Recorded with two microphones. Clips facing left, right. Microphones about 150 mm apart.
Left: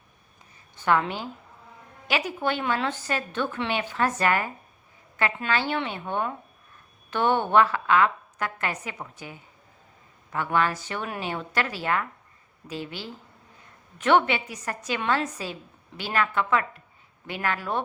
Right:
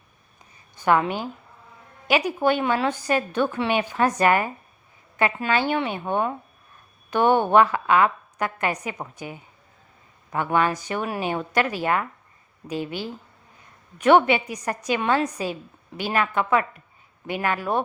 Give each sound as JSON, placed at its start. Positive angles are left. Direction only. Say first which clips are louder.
{"t": 0.8, "sound": "speech", "louder": "right 3 dB", "side_deg": -15}
{"t": 14.3, "sound": "speech", "louder": "right 6 dB", "side_deg": -15}